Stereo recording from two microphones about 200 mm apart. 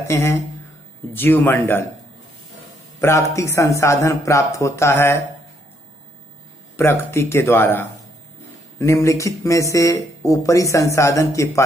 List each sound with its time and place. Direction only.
0.1 s speech: 15° left (ahead or behind)
3.0 s speech: 15° left (ahead or behind)
6.8 s speech: 10° left (ahead or behind)